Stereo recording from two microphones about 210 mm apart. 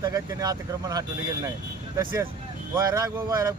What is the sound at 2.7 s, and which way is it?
Speech, 15° right (ahead or behind).